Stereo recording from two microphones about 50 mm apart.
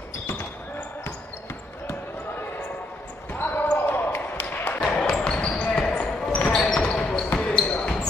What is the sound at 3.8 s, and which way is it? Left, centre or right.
Basketball bounce, left.